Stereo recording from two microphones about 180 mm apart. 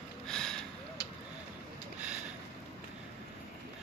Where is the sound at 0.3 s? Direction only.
5° left (ahead or behind).